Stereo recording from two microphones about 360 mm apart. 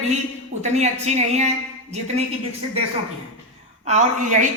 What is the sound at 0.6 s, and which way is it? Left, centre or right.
Speech, centre.